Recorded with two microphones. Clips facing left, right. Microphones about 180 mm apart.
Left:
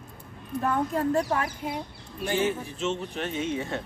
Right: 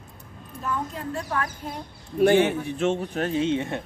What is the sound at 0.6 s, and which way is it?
Speech, 60° left (ahead or behind).